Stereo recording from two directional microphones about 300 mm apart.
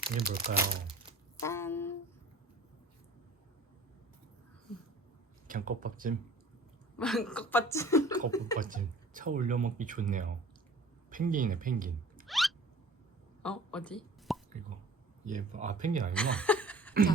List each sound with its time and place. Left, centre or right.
0.0 s speech: right
1.4 s a sound: centre
5.5 s speech: right
7.0 s speech: centre
8.5 s speech: right
12.2 s a sound: centre
13.4 s plop: centre
15.2 s speech: right
16.1 s a sound: centre